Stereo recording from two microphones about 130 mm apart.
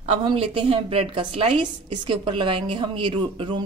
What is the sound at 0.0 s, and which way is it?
A woman's voice, 45° right (ahead or behind).